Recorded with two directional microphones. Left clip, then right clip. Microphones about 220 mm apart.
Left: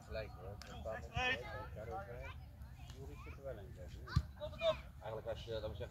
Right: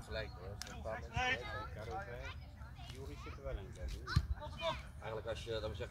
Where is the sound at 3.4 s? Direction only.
55° right (ahead or behind).